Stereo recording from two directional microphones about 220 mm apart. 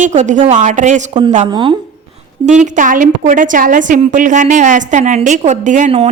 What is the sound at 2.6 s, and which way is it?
A woman's voice, 35° right (ahead or behind).